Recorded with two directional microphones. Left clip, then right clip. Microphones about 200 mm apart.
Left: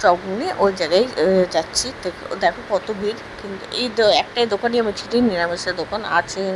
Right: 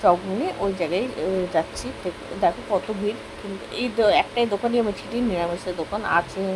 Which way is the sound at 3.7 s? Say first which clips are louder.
Left 3 dB; 25° left (ahead or behind).